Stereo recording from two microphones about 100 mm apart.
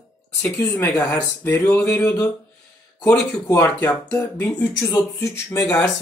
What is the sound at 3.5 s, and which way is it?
Speech, 35° left (ahead or behind).